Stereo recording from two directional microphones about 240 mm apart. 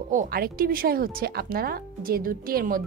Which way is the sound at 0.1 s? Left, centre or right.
Right.